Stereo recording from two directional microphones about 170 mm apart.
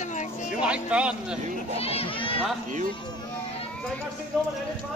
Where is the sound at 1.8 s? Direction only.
35° left (ahead or behind).